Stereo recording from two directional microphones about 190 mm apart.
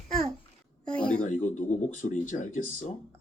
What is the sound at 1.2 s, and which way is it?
Speech, 40° left (ahead or behind).